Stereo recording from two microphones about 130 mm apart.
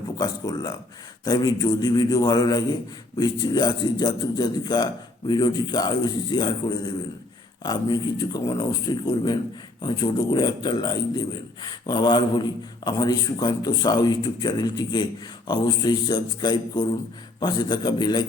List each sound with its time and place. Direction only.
0.2 s a man's voice: 30° left (ahead or behind)